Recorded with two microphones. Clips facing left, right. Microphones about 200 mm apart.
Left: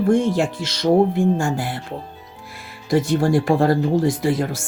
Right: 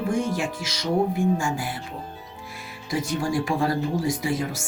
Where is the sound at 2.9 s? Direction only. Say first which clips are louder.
Left 8 dB; 55° left (ahead or behind).